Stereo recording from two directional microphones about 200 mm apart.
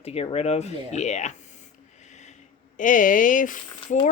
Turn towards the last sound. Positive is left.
turn(degrees=40)  # may be behind; listen again after turning